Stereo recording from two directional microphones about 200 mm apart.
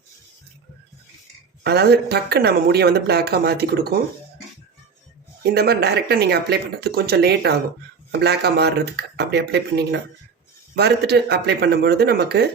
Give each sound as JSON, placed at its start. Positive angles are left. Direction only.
{"t": 1.6, "sound": "speech", "side_deg": -55}
{"t": 5.5, "sound": "speech", "side_deg": -55}